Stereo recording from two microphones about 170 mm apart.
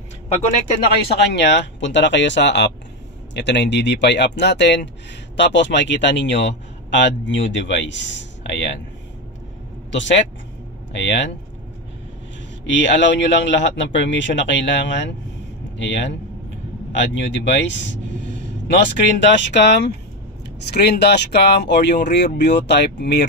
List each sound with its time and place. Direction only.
1.3 s a man's voice: 90° left
9.8 s speech: 90° left
12.7 s a man's voice: 90° left
20.7 s speech: 75° left (ahead or behind)